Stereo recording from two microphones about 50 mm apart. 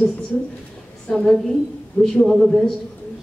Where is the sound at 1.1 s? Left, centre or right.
Centre.